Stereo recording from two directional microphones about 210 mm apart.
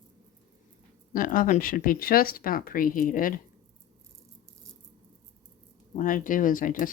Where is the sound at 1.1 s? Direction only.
40° left (ahead or behind).